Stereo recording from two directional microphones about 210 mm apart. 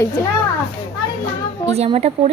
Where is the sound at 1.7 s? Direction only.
30° right (ahead or behind).